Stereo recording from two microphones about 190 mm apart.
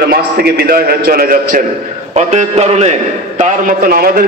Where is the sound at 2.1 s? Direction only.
35° right (ahead or behind).